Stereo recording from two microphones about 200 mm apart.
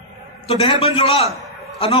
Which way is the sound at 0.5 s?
30° left (ahead or behind).